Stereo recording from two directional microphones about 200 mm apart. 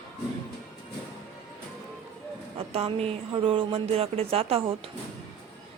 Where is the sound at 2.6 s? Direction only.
30° right (ahead or behind).